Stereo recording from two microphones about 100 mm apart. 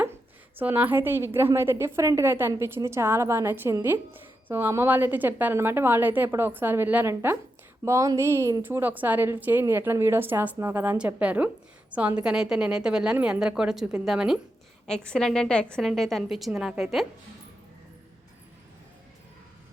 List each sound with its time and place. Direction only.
0.6 s a woman's voice: 15° right (ahead or behind)
10.9 s a woman's voice: 10° right (ahead or behind)
14.8 s a woman's voice: 10° left (ahead or behind)